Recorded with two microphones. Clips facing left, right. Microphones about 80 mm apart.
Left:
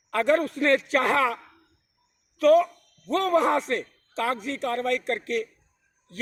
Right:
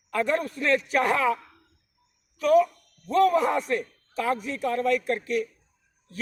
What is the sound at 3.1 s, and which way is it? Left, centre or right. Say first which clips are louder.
A man's voice: right 1 dB; left.